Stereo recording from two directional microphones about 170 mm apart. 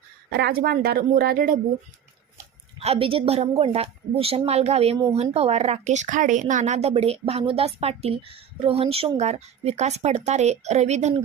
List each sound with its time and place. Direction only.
0.3 s a woman's voice: 70° right (ahead or behind)
2.7 s a woman's voice: 35° right (ahead or behind)